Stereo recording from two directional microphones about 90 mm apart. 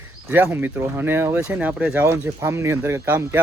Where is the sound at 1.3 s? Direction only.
15° right (ahead or behind).